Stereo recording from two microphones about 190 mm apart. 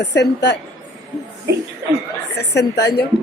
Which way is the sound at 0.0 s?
65° left (ahead or behind).